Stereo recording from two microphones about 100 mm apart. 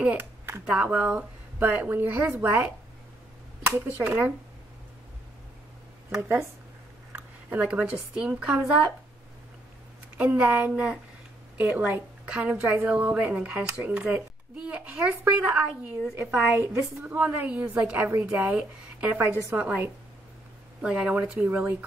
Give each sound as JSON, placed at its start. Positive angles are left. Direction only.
{"t": 0.0, "sound": "a woman's voice", "side_deg": -10}
{"t": 3.7, "sound": "speech", "side_deg": -20}
{"t": 7.1, "sound": "a woman's voice", "side_deg": -20}
{"t": 10.1, "sound": "a woman's voice", "side_deg": -15}